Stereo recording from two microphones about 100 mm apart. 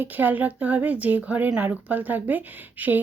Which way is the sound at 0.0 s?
20° right (ahead or behind).